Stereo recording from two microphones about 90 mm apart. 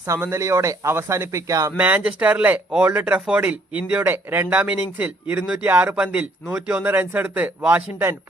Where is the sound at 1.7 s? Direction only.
20° right (ahead or behind).